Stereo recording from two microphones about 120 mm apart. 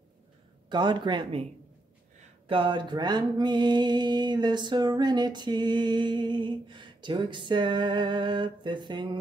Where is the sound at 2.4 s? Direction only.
45° right (ahead or behind).